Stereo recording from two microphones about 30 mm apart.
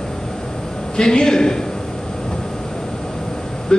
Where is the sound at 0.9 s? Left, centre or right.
Left.